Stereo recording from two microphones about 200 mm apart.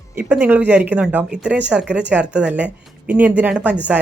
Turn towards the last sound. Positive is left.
turn(degrees=-5)  # may be behind; listen again after turning